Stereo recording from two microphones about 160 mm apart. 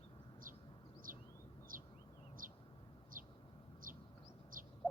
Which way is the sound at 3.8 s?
60° right (ahead or behind).